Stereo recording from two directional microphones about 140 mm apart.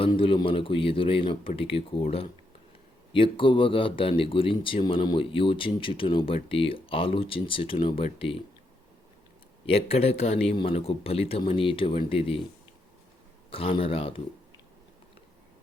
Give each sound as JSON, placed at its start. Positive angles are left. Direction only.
{"t": 0.0, "sound": "speech", "side_deg": 40}
{"t": 9.6, "sound": "speech", "side_deg": 45}
{"t": 13.5, "sound": "speech", "side_deg": 40}